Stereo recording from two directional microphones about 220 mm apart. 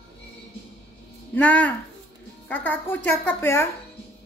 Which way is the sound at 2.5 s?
10° left (ahead or behind).